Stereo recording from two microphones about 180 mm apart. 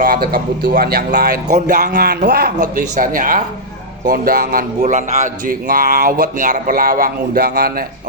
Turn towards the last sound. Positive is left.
turn(degrees=-55)  # may be behind; listen again after turning